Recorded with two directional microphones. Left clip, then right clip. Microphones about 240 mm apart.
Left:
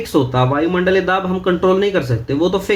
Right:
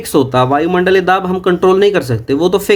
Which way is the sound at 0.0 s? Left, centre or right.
Right.